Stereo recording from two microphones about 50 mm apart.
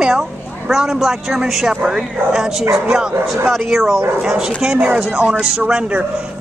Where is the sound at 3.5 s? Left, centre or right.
Centre; by 6.1 s right.